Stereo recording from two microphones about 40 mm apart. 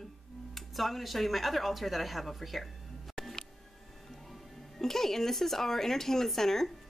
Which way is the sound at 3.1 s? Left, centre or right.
Centre.